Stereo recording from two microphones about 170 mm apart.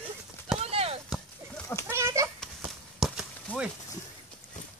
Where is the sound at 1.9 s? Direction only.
15° right (ahead or behind).